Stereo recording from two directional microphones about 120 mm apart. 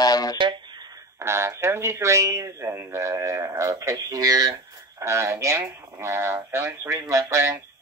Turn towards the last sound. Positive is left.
turn(degrees=-25)  # may be behind; listen again after turning